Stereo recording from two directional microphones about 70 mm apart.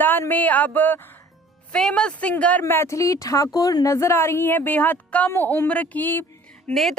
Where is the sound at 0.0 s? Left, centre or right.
Left.